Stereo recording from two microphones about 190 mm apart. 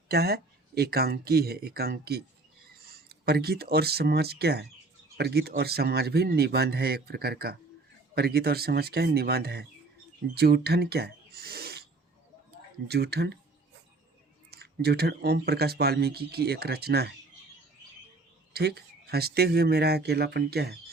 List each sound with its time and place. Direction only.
0.1 s speech: 55° right (ahead or behind)
12.9 s speech: 60° right (ahead or behind)
14.5 s speech: 55° right (ahead or behind)
18.5 s speech: 55° right (ahead or behind)